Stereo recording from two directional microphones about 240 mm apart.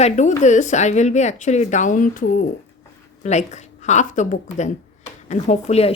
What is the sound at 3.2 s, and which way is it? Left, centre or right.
Speech, left.